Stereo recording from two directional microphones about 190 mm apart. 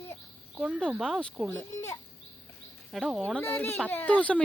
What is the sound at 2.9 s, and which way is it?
Speech, centre (ahead or behind).